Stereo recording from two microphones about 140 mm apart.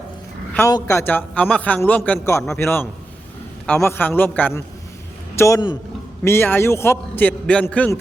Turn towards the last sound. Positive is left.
turn(degrees=10)  # may be behind; listen again after turning